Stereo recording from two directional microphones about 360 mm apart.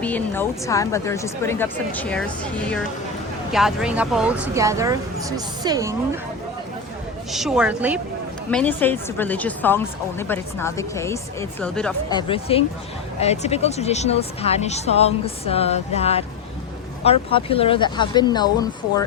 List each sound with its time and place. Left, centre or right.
0.0 s a woman's voice: centre
7.3 s a woman's voice: centre